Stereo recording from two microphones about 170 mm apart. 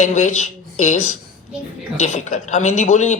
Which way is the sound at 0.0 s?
45° left (ahead or behind).